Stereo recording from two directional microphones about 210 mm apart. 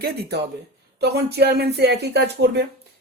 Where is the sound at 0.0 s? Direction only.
50° right (ahead or behind).